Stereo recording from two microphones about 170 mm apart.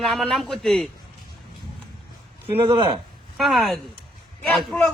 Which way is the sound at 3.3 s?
Centre (ahead or behind).